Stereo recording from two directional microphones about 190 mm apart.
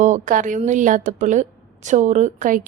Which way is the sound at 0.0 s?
40° right (ahead or behind).